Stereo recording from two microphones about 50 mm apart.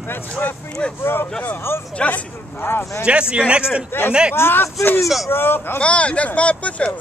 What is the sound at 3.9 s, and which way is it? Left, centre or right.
Speech, left.